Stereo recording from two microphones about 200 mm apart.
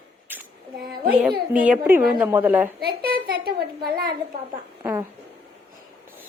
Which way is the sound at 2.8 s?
50° right (ahead or behind).